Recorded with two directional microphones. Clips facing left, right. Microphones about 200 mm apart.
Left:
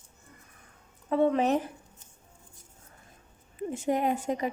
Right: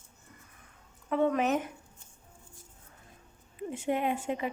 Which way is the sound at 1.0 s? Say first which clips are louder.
Left 3 dB; 30° left (ahead or behind).